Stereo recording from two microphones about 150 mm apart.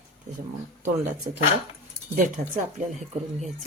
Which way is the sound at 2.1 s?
60° right (ahead or behind).